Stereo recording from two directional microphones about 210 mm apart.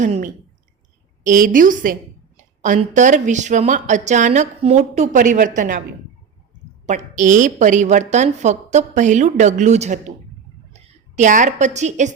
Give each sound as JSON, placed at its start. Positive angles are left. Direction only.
{"t": 0.0, "sound": "a woman's voice", "side_deg": -35}
{"t": 6.8, "sound": "a woman's voice", "side_deg": -35}